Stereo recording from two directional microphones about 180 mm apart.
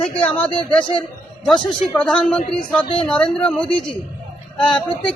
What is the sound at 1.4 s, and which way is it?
A woman's voice, 5° left (ahead or behind).